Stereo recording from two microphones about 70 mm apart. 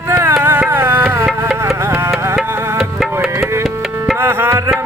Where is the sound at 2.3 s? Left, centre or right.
Centre.